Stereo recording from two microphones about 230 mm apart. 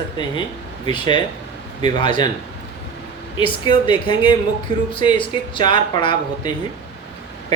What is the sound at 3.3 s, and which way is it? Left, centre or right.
Speech, left.